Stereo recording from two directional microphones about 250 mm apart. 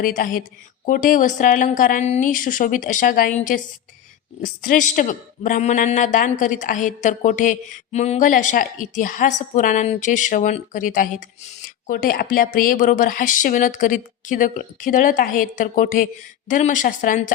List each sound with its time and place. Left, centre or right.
0.0 s a man's voice: left